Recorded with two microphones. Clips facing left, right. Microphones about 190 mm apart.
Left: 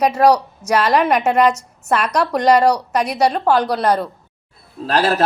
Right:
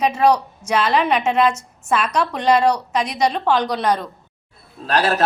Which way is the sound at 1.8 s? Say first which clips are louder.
Left 2 dB; 70° left (ahead or behind).